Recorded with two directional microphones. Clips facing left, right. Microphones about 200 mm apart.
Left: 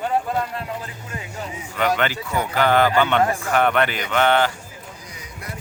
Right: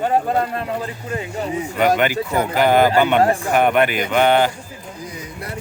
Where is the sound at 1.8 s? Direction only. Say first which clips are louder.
Right 4 dB; 15° right (ahead or behind).